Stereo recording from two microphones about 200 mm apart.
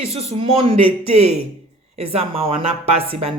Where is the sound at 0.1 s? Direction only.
30° right (ahead or behind).